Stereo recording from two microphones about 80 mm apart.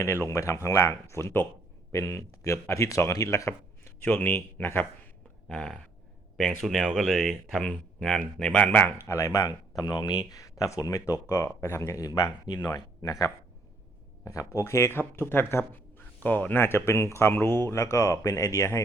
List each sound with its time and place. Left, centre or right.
0.0 s speech: left
4.0 s speech: left
5.5 s a sound: centre
6.3 s speech: centre
8.8 s speech: left
9.5 s speech: left
11.4 s speech: left